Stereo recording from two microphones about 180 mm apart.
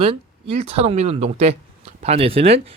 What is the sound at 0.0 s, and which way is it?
Speech, 30° right (ahead or behind).